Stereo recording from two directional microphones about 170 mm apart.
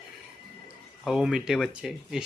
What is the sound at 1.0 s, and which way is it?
Speech, centre (ahead or behind).